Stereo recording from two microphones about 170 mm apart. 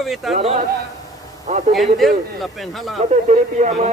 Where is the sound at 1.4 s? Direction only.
45° right (ahead or behind).